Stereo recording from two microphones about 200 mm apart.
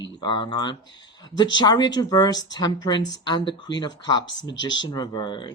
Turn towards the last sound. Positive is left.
turn(degrees=20)  # may be behind; listen again after turning